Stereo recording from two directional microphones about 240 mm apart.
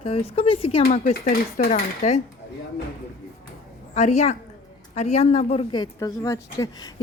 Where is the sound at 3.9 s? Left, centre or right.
Left.